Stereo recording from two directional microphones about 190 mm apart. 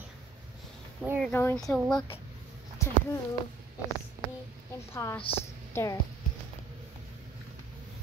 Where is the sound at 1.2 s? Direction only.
10° left (ahead or behind).